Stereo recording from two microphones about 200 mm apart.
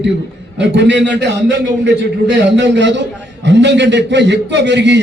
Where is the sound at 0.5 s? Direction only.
60° right (ahead or behind).